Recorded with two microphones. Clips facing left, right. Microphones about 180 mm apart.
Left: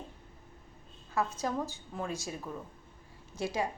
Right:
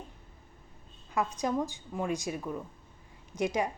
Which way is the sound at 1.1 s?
15° right (ahead or behind).